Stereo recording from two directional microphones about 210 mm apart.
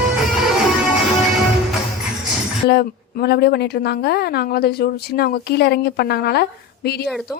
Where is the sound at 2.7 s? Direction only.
50° left (ahead or behind).